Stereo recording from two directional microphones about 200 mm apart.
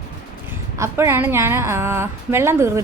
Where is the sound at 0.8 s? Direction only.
15° right (ahead or behind).